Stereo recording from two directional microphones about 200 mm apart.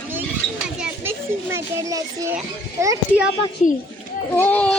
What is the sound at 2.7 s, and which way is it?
Speech, 15° right (ahead or behind).